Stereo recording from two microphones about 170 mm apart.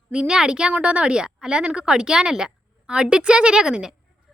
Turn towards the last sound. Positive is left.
turn(degrees=-5)  # may be behind; listen again after turning